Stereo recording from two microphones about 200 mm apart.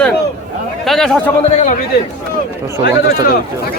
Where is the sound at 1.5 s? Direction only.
40° left (ahead or behind).